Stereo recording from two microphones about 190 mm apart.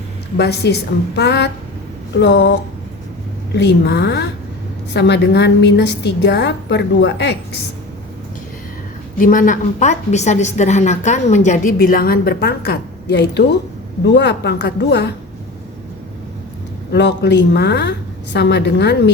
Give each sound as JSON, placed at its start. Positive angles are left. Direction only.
{"t": 0.3, "sound": "a woman's voice", "side_deg": 60}
{"t": 3.5, "sound": "a woman's voice", "side_deg": 65}
{"t": 9.1, "sound": "a woman's voice", "side_deg": 45}
{"t": 16.9, "sound": "a woman's voice", "side_deg": 65}